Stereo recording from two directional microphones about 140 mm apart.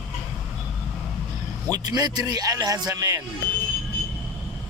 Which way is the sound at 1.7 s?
30° right (ahead or behind).